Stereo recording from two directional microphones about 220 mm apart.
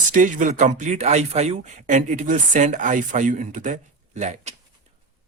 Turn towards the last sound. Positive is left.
turn(degrees=-30)  # may be behind; listen again after turning